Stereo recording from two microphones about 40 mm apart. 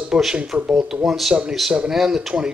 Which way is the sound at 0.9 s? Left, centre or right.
Centre.